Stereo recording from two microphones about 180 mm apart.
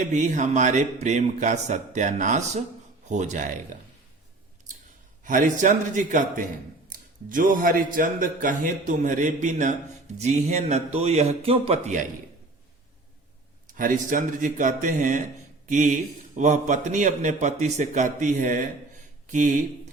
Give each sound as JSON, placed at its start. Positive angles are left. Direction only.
{"t": 0.0, "sound": "a man's voice", "side_deg": -40}
{"t": 5.2, "sound": "a man's voice", "side_deg": -45}
{"t": 13.7, "sound": "a man's voice", "side_deg": -50}